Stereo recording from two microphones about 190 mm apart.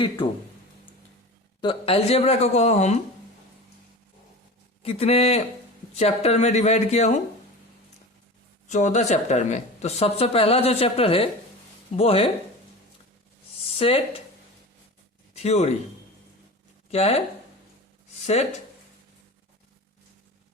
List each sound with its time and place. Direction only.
1.6 s speech: 30° left (ahead or behind)
4.8 s speech: 30° left (ahead or behind)
8.7 s speech: 40° left (ahead or behind)
13.7 s speech: 30° left (ahead or behind)
15.4 s speech: 35° left (ahead or behind)
16.9 s speech: 35° left (ahead or behind)